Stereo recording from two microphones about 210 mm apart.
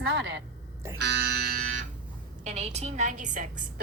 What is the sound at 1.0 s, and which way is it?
Music, 50° right (ahead or behind).